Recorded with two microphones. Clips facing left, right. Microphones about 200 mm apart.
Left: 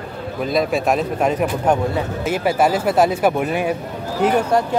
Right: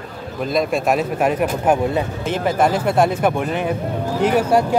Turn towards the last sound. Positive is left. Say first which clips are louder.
# right 1 dB
turn(degrees=-10)  # may be behind; listen again after turning